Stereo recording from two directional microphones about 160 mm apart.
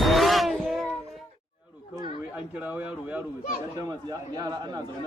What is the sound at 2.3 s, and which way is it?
Speech, 10° right (ahead or behind).